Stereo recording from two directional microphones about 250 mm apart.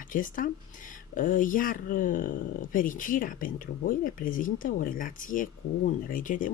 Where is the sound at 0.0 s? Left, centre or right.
Left.